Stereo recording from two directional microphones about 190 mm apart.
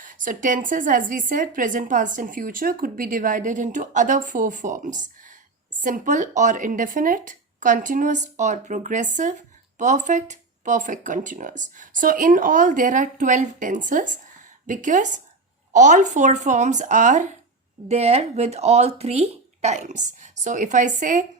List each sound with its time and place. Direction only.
0.0 s a woman's voice: 45° right (ahead or behind)